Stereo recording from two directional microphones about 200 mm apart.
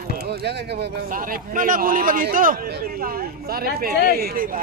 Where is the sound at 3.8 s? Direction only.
50° right (ahead or behind).